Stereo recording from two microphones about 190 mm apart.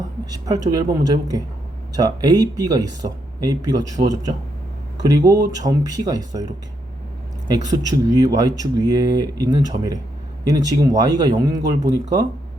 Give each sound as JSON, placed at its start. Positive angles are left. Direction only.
{"t": 0.3, "sound": "speech", "side_deg": -20}